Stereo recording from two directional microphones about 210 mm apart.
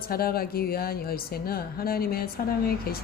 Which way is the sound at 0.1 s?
45° left (ahead or behind).